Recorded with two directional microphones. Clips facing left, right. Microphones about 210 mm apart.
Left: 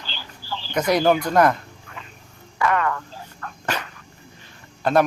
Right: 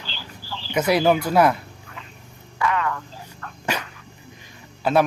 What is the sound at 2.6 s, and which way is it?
Frog, 50° left (ahead or behind).